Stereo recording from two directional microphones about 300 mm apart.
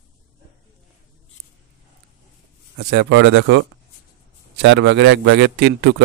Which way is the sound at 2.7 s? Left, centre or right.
Right.